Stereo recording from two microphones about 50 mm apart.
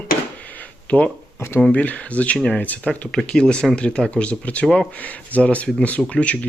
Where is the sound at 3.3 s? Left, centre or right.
Centre.